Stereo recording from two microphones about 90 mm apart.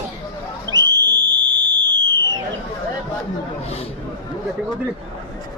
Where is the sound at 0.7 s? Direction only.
50° right (ahead or behind).